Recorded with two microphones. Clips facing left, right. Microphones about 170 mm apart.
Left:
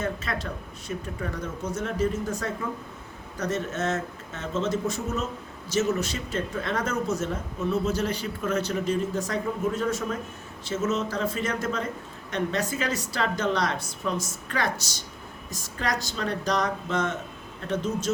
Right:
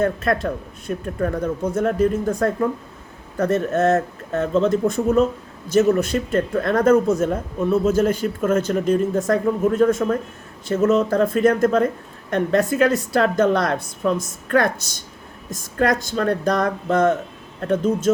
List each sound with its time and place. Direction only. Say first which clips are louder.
0.0 s speech: right 10 dB; 55° right (ahead or behind)